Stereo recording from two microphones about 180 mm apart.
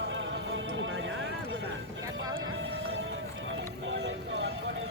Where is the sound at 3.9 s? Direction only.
90° right.